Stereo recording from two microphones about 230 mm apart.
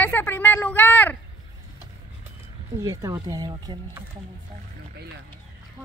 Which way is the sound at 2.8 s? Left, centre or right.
Centre.